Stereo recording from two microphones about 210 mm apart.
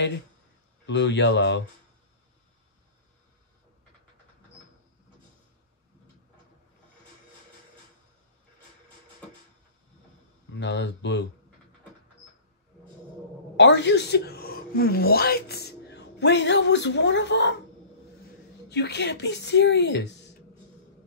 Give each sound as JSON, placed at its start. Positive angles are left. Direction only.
{"t": 0.8, "sound": "speech", "side_deg": 55}
{"t": 10.5, "sound": "speech", "side_deg": 55}
{"t": 13.6, "sound": "speech", "side_deg": 55}
{"t": 18.7, "sound": "speech", "side_deg": 55}